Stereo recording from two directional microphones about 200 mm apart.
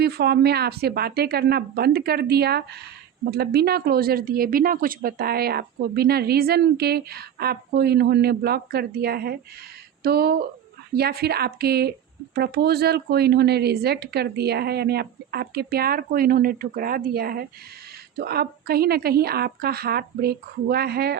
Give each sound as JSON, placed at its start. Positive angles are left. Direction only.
{"t": 0.0, "sound": "speech", "side_deg": -55}